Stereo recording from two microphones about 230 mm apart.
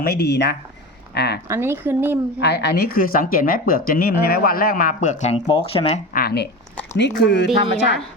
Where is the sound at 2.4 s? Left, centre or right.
Left.